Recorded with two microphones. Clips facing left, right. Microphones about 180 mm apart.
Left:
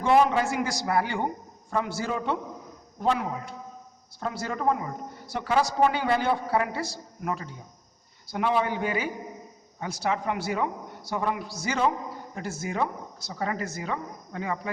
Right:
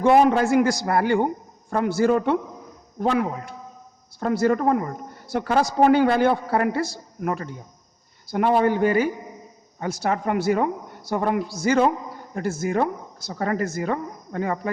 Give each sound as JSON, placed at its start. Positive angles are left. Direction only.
{"t": 0.0, "sound": "speech", "side_deg": -55}